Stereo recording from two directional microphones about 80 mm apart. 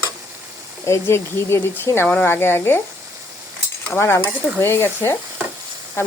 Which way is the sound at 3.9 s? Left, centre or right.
Left.